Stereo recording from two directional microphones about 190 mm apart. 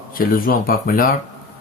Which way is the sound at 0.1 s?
50° left (ahead or behind).